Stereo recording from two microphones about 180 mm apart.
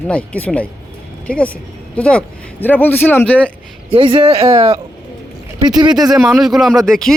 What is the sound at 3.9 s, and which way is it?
Speech, 30° right (ahead or behind).